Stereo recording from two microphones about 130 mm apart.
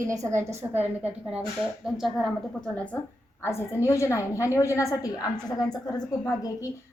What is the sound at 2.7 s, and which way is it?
Speech, 10° left (ahead or behind).